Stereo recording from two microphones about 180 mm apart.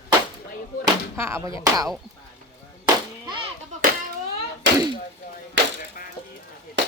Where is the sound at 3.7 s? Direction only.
40° right (ahead or behind).